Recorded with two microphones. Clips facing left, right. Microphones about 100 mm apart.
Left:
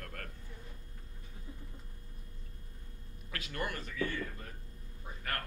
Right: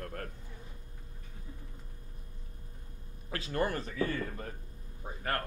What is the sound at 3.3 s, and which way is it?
Speech, 30° right (ahead or behind).